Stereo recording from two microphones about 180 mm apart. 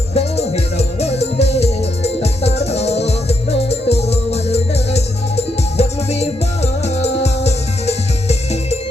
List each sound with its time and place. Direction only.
0.1 s music: 35° left (ahead or behind)